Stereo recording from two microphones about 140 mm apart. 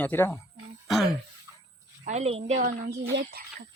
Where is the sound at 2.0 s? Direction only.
55° right (ahead or behind).